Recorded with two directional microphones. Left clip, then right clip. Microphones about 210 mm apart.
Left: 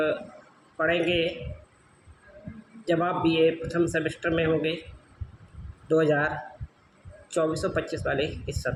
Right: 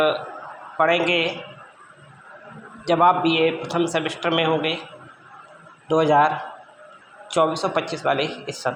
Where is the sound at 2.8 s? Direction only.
15° left (ahead or behind).